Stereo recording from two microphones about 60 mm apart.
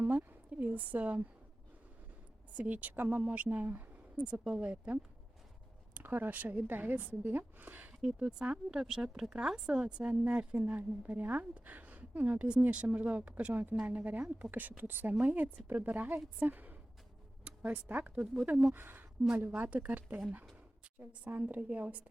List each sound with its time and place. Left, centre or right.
0.0 s a sound: right
2.5 s a woman's voice: right
4.2 s speech: centre
5.9 s a woman's voice: right
8.0 s a woman's voice: centre
21.4 s a woman's voice: right